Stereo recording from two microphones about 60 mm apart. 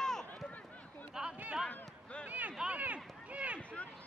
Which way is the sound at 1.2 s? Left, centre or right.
Centre.